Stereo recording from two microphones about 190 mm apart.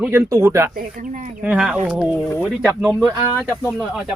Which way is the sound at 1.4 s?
5° right (ahead or behind).